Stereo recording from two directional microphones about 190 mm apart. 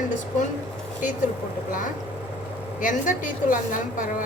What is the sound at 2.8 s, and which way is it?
A woman's voice, 45° left (ahead or behind).